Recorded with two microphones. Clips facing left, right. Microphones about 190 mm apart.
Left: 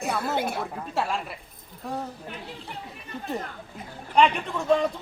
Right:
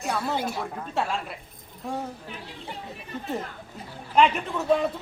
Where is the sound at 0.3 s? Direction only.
60° left (ahead or behind).